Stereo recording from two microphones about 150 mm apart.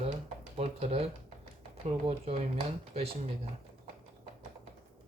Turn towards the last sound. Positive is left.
turn(degrees=-45)  # may be behind; listen again after turning